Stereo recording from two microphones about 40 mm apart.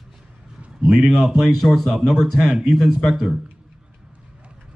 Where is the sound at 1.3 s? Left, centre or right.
Centre.